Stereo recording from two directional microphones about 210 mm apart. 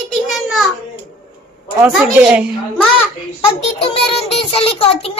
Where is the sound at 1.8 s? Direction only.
5° right (ahead or behind).